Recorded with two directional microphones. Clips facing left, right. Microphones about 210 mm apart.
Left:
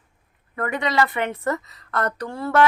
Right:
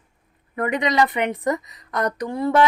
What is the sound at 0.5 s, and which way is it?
A woman's voice, 20° right (ahead or behind).